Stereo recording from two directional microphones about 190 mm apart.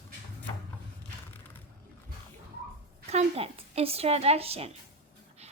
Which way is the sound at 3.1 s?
35° right (ahead or behind).